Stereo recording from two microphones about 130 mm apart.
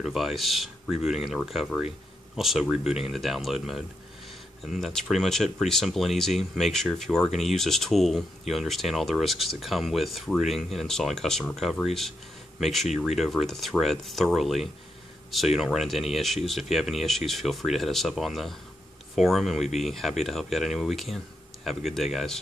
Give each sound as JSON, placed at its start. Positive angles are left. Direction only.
{"t": 0.0, "sound": "speech", "side_deg": 0}